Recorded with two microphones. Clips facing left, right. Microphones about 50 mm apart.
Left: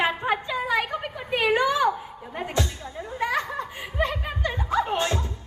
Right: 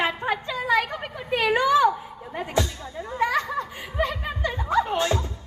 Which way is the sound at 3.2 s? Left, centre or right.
Centre.